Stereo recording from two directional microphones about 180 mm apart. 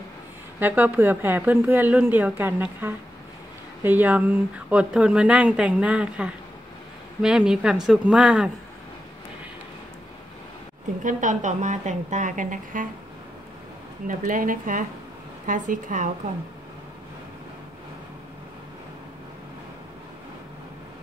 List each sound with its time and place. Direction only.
0.6 s a woman's voice: 10° right (ahead or behind)
11.1 s a woman's voice: 45° right (ahead or behind)
14.0 s a woman's voice: 50° right (ahead or behind)